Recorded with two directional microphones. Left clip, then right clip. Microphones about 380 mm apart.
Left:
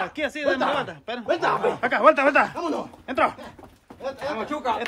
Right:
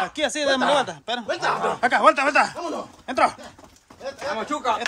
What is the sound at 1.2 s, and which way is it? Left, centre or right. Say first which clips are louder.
Speech: left 3 dB; left.